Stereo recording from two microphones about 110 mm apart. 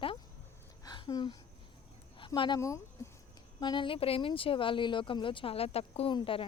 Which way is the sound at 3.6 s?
45° left (ahead or behind).